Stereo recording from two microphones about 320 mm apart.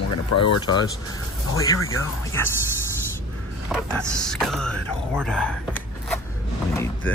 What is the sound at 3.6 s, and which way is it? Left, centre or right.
Speech, centre.